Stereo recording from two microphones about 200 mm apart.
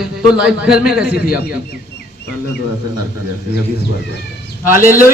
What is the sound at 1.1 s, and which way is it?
Speech, 50° left (ahead or behind).